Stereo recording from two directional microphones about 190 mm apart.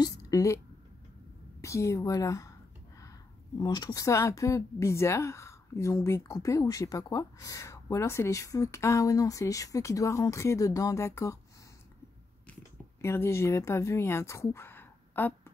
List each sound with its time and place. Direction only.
0.0 s a woman's voice: 20° left (ahead or behind)
1.6 s a woman's voice: 15° left (ahead or behind)
13.0 s speech: 15° left (ahead or behind)